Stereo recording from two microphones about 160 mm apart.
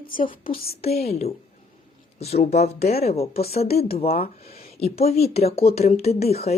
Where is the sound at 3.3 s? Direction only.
75° left (ahead or behind).